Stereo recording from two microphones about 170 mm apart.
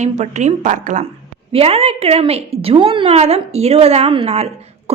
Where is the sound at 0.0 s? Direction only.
45° right (ahead or behind).